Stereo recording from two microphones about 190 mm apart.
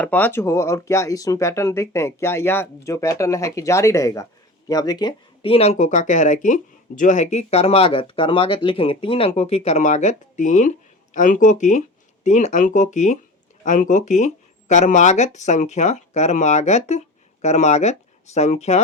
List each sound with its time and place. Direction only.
0.0 s speech: 10° left (ahead or behind); by 18.8 s 35° left (ahead or behind)